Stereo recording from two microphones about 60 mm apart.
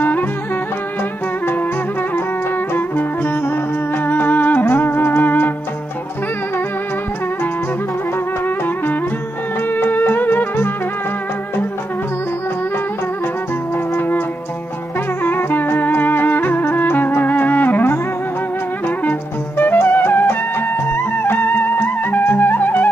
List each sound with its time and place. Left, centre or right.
4.1 s music: left
9.8 s music: left
15.2 s music: left
19.0 s music: left